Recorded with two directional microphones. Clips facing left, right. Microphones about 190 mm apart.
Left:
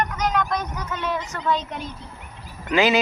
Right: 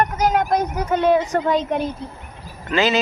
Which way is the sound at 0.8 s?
55° right (ahead or behind).